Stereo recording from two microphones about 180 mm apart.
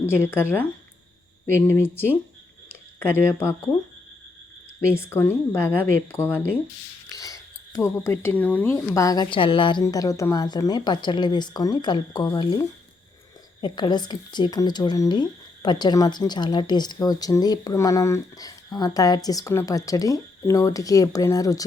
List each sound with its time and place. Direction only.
0.0 s speech: 15° left (ahead or behind)
4.9 s a woman's voice: 15° left (ahead or behind)